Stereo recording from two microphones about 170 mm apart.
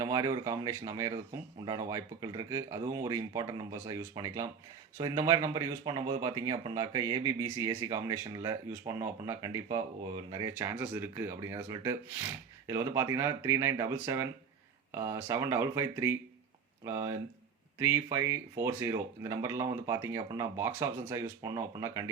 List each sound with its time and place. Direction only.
0.0 s speech: 20° right (ahead or behind)